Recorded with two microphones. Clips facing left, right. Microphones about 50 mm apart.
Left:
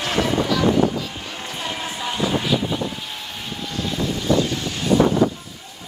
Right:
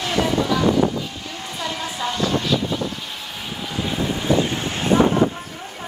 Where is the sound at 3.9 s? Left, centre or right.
Right.